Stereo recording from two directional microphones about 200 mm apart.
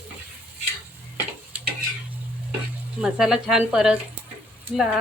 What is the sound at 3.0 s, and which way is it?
Speech, centre (ahead or behind).